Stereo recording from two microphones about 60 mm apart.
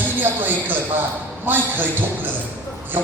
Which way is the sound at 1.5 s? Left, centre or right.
Right.